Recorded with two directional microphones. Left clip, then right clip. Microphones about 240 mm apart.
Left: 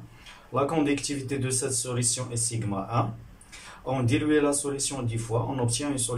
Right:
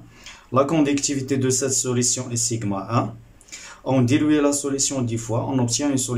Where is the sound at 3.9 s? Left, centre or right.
Right.